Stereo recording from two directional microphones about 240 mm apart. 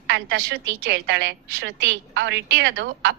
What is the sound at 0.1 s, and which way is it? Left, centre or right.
A woman's voice, right.